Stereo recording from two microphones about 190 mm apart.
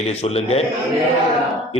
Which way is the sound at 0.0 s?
35° left (ahead or behind).